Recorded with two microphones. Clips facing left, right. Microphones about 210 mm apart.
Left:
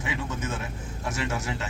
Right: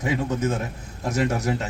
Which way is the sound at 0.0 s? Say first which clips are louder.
Right 8 dB; 40° right (ahead or behind).